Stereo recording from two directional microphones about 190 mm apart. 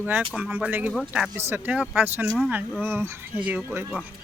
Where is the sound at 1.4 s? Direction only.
10° right (ahead or behind).